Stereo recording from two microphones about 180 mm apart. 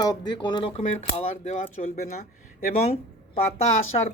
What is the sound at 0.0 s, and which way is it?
Speech, 25° left (ahead or behind).